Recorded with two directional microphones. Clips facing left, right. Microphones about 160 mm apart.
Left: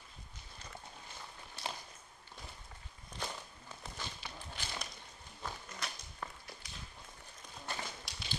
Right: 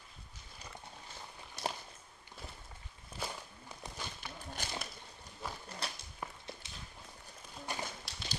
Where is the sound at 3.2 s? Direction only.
5° right (ahead or behind).